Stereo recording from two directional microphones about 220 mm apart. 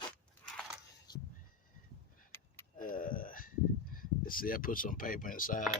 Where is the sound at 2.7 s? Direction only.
40° left (ahead or behind).